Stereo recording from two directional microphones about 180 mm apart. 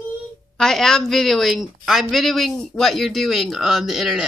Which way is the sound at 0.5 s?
Centre (ahead or behind).